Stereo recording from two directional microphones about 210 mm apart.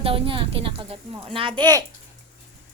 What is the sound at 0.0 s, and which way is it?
A woman's voice, 25° right (ahead or behind).